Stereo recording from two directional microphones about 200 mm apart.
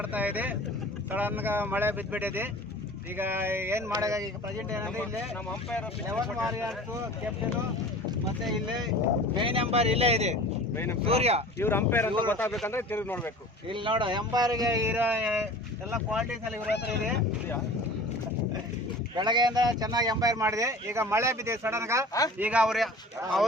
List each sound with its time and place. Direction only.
0.0 s speech: 10° right (ahead or behind)
6.1 s speech: centre (ahead or behind)
9.3 s speech: 30° right (ahead or behind)
11.6 s speech: 10° left (ahead or behind)
13.7 s speech: 25° right (ahead or behind); by 16.5 s 10° right (ahead or behind)
19.1 s speech: 20° right (ahead or behind); by 22.9 s 5° right (ahead or behind)